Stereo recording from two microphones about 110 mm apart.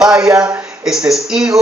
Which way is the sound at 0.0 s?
10° right (ahead or behind).